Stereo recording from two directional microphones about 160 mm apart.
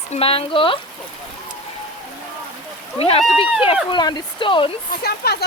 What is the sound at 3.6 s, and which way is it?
Speech, 30° left (ahead or behind).